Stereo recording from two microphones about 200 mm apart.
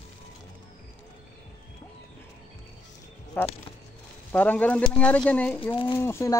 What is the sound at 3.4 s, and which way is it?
Speech, 10° left (ahead or behind).